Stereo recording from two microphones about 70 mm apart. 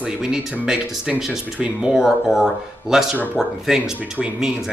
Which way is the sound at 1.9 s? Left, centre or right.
Centre.